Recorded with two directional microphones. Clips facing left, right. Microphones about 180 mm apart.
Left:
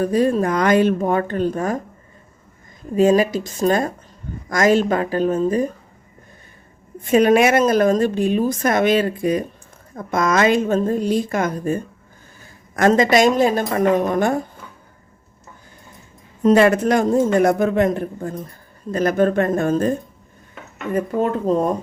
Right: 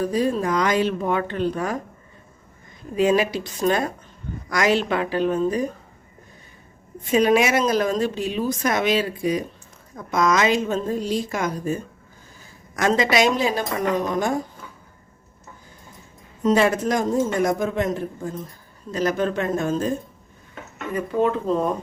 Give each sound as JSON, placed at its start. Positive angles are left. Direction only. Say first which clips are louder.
{"t": 0.0, "sound": "a woman's voice", "louder": "left 4 dB", "side_deg": 55}
{"t": 2.9, "sound": "a woman's voice", "louder": "left 4 dB", "side_deg": 45}
{"t": 7.0, "sound": "a woman's voice", "louder": "left 4 dB", "side_deg": 55}
{"t": 16.4, "sound": "a woman's voice", "louder": "left 5 dB", "side_deg": 60}